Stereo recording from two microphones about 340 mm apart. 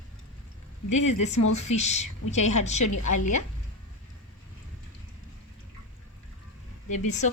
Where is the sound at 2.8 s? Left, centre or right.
Left.